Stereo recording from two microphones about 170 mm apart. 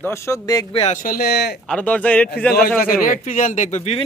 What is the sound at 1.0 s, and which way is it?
Speech, 60° left (ahead or behind).